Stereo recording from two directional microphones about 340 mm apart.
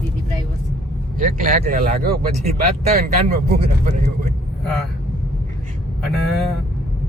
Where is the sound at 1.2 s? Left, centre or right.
Right.